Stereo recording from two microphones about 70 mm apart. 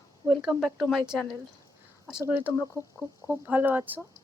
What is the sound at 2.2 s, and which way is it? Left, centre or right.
A woman's voice, right.